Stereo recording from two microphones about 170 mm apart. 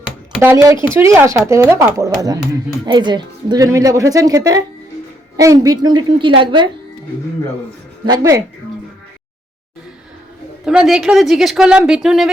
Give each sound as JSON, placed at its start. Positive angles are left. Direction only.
{"t": 0.4, "sound": "speech", "side_deg": -20}
{"t": 8.0, "sound": "speech", "side_deg": -20}
{"t": 10.7, "sound": "speech", "side_deg": -5}